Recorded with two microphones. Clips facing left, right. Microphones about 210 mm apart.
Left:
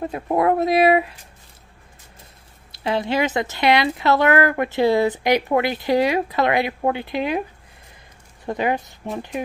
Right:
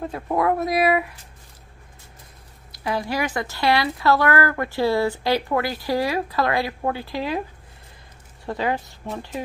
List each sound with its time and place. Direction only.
0.0 s speech: 20° left (ahead or behind)
2.7 s speech: 25° left (ahead or behind)
8.5 s speech: 20° left (ahead or behind)